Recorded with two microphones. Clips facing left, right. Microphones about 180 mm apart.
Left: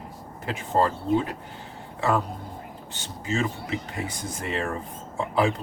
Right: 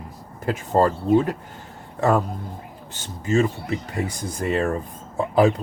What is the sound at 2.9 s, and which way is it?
Speech, 45° right (ahead or behind).